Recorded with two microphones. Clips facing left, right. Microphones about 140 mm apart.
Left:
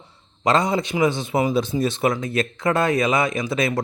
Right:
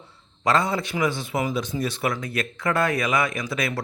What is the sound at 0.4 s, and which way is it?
A man's voice, 20° left (ahead or behind).